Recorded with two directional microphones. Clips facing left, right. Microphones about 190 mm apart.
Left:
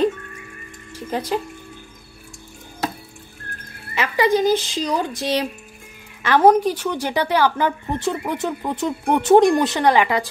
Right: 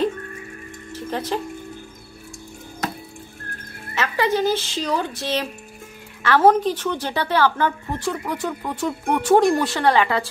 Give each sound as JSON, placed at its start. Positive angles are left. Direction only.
{"t": 0.9, "sound": "speech", "side_deg": 10}
{"t": 3.9, "sound": "a woman's voice", "side_deg": 15}